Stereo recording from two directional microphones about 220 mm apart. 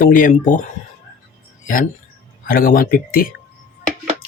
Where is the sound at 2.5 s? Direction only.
40° left (ahead or behind).